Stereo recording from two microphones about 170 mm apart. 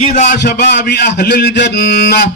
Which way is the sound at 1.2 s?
65° left (ahead or behind).